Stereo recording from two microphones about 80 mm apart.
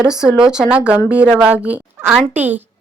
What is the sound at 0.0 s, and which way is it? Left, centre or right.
A woman's voice, centre.